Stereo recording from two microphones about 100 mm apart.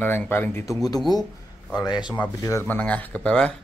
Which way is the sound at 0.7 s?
40° left (ahead or behind).